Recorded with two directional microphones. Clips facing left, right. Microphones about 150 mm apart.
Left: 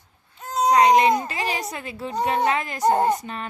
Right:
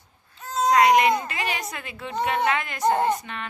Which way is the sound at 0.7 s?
30° left (ahead or behind).